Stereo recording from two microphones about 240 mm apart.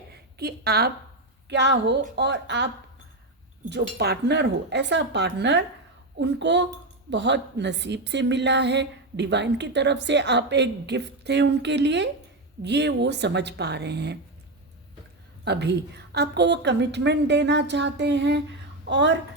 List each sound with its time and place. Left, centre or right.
0.3 s a woman's voice: right
3.7 s a woman's voice: right
15.4 s a woman's voice: right